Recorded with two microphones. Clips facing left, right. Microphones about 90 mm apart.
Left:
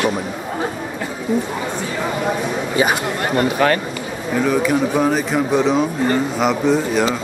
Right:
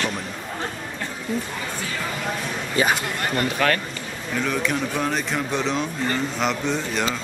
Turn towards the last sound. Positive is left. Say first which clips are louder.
# left 8 dB
turn(degrees=5)  # may be behind; listen again after turning